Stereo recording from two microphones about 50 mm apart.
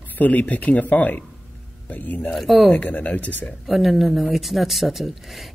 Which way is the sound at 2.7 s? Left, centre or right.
Left.